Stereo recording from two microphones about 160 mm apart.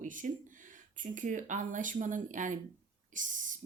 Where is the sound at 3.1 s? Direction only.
55° right (ahead or behind).